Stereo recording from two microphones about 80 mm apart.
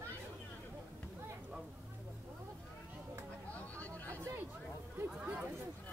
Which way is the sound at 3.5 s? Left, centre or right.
Centre.